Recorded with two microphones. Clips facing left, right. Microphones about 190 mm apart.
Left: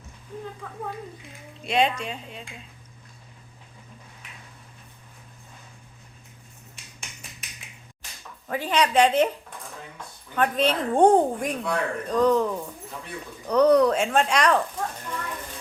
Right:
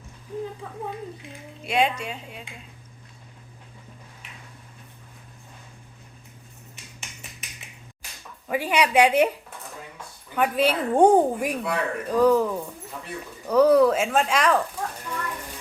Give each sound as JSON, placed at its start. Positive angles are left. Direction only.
{"t": 1.6, "sound": "speech", "side_deg": -10}
{"t": 8.4, "sound": "speech", "side_deg": -10}
{"t": 10.3, "sound": "speech", "side_deg": -10}